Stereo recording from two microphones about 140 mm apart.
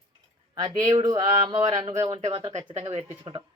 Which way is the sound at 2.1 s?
45° right (ahead or behind).